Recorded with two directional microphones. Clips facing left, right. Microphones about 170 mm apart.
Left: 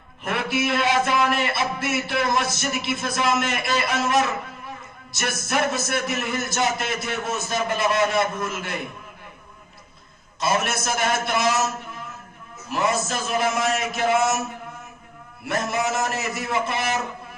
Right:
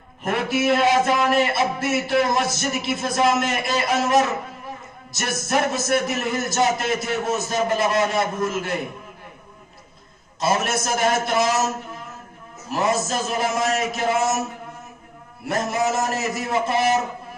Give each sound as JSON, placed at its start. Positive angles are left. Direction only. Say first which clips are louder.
{"t": 0.2, "sound": "a man's voice", "louder": "right 3 dB", "side_deg": -40}
{"t": 10.4, "sound": "a man's voice", "louder": "right 2 dB", "side_deg": -40}
{"t": 12.6, "sound": "a man's voice", "louder": "right 2 dB", "side_deg": -40}
{"t": 15.4, "sound": "a man's voice", "louder": "right 2 dB", "side_deg": -40}